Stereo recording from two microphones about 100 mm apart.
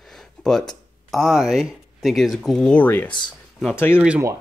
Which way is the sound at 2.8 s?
20° left (ahead or behind).